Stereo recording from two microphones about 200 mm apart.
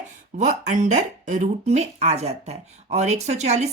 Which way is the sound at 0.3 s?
40° right (ahead or behind).